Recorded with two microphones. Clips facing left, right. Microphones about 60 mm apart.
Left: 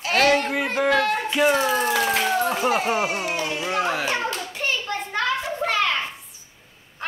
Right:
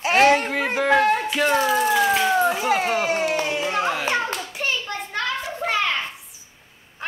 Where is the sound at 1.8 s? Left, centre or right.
Centre.